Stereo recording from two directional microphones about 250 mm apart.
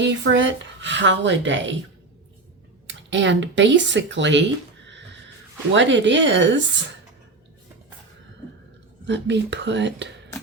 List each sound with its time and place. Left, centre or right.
0.0 s speech: right
2.8 s speech: right
5.7 s speech: right
9.0 s speech: right